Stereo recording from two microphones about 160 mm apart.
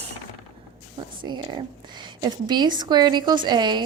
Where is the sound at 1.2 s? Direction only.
30° right (ahead or behind).